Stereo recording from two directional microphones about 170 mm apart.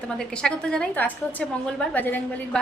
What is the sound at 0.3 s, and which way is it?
A woman's voice, 5° left (ahead or behind).